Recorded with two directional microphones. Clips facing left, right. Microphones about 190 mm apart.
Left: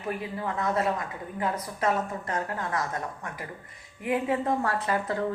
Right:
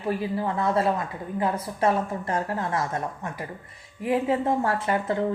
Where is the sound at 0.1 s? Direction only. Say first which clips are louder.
Right 5 dB; 30° right (ahead or behind).